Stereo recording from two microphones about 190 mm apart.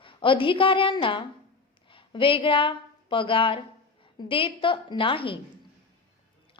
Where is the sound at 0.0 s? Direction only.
25° left (ahead or behind).